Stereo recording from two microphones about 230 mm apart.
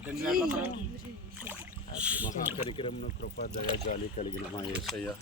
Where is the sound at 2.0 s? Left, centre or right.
Centre.